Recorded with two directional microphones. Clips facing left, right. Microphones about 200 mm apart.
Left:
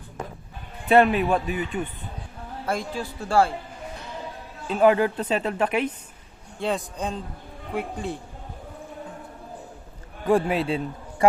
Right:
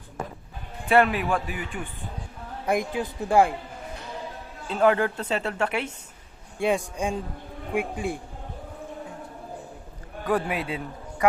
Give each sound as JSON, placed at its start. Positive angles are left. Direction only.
{"t": 0.9, "sound": "a man's voice", "side_deg": 20}
{"t": 2.6, "sound": "speech", "side_deg": -15}
{"t": 4.7, "sound": "speech", "side_deg": 15}
{"t": 6.6, "sound": "speech", "side_deg": -10}
{"t": 10.2, "sound": "a man's voice", "side_deg": 25}